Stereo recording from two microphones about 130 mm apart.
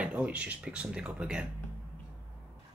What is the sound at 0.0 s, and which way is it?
Speech, 10° right (ahead or behind).